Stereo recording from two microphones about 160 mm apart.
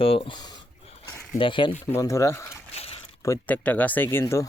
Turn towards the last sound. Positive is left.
turn(degrees=15)  # may be behind; listen again after turning